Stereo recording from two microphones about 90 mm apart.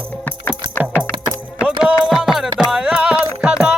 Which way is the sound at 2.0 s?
5° right (ahead or behind).